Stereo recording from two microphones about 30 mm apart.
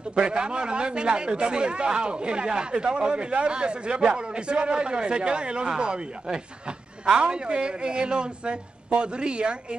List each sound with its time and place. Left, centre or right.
0.1 s a man's voice: right